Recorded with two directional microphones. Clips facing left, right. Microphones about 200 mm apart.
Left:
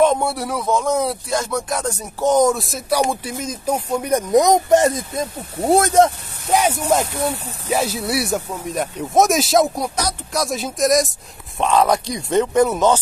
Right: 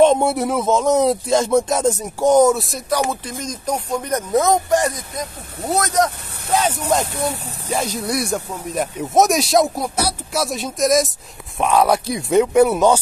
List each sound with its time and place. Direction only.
0.0 s speech: 20° right (ahead or behind); by 3.0 s centre (ahead or behind)
3.0 s speech: 10° left (ahead or behind); by 6.1 s 25° left (ahead or behind)
6.5 s speech: 10° left (ahead or behind); by 13.0 s 10° right (ahead or behind)